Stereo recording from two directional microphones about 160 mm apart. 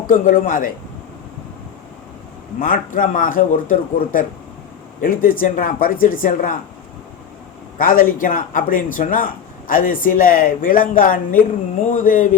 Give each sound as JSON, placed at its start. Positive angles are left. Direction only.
{"t": 0.1, "sound": "speech", "side_deg": 55}
{"t": 2.6, "sound": "speech", "side_deg": 60}
{"t": 7.8, "sound": "speech", "side_deg": 60}